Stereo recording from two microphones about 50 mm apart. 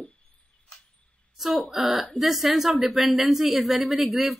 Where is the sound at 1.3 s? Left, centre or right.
Centre.